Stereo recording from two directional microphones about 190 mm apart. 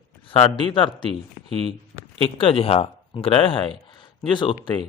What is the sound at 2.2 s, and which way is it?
Speech, 30° left (ahead or behind).